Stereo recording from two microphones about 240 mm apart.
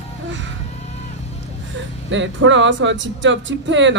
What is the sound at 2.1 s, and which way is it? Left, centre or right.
Speech, right.